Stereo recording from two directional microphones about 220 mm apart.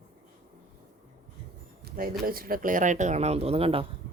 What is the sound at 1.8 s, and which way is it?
Speech, 40° right (ahead or behind).